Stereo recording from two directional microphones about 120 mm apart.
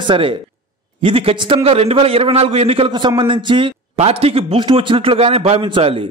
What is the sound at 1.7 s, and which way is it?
A man's voice, 55° right (ahead or behind).